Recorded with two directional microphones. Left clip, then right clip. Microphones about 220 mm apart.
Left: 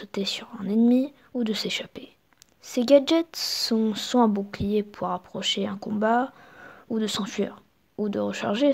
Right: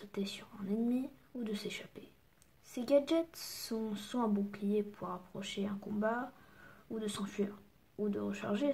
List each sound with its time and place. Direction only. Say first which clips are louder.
0.0 s speech: left 13 dB; 40° left (ahead or behind)